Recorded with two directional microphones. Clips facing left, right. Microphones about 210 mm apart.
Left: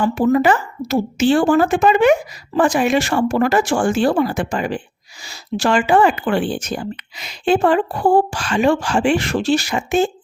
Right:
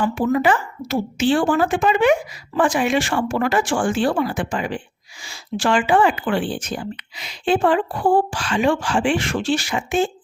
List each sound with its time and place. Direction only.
0.0 s speech: 40° left (ahead or behind)